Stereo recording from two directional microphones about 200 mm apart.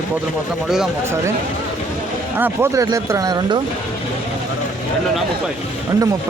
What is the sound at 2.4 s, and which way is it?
Speech, 10° right (ahead or behind).